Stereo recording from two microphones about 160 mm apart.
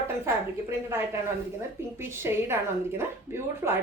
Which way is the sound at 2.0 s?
15° right (ahead or behind).